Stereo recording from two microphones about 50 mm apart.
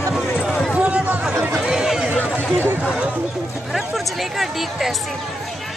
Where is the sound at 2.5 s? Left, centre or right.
Right.